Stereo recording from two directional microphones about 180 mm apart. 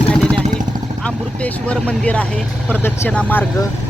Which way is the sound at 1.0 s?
5° left (ahead or behind).